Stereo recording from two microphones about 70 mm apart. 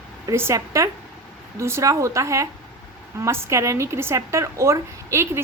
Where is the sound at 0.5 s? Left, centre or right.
Right.